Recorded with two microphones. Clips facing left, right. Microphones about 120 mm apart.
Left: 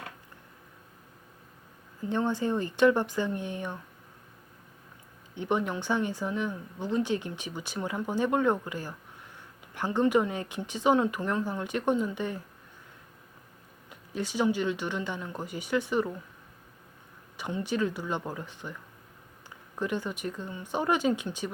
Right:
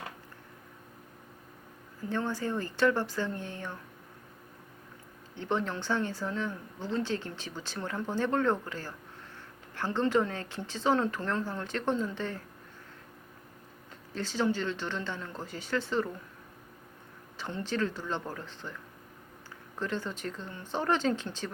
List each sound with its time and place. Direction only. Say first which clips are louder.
2.0 s speech: left 4 dB; 20° left (ahead or behind)
5.3 s speech: left 3 dB; 15° left (ahead or behind)
14.1 s speech: left 2 dB; 15° left (ahead or behind)
17.3 s speech: left 3 dB; 15° left (ahead or behind)
19.8 s speech: left 3 dB; 15° left (ahead or behind)